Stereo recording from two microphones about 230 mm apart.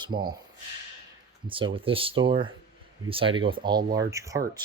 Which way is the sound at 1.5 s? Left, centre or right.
Right.